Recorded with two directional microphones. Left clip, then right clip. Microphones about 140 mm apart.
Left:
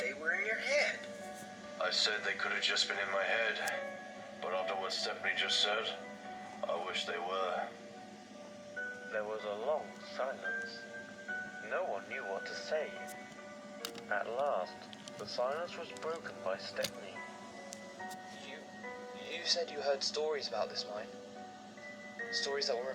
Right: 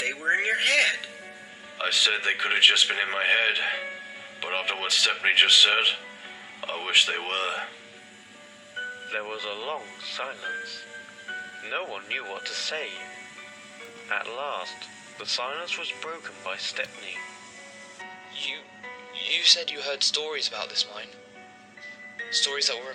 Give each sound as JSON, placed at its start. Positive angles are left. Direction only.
{"t": 0.0, "sound": "music", "side_deg": -25}
{"t": 1.8, "sound": "a man's voice", "side_deg": -25}
{"t": 9.0, "sound": "a man's voice", "side_deg": -20}
{"t": 14.1, "sound": "a man's voice", "side_deg": -20}
{"t": 19.2, "sound": "a man's voice", "side_deg": -20}
{"t": 22.2, "sound": "speech", "side_deg": -20}